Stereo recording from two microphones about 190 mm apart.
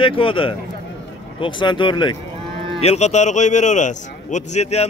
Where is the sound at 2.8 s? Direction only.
35° left (ahead or behind).